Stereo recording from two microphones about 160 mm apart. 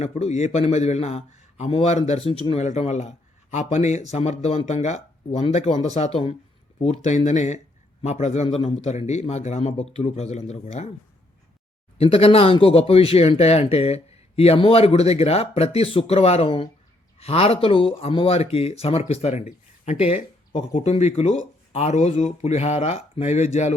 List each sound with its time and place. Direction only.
0.0 s a man's voice: 45° left (ahead or behind)
11.9 s speech: 35° left (ahead or behind)
20.8 s a man's voice: 45° left (ahead or behind)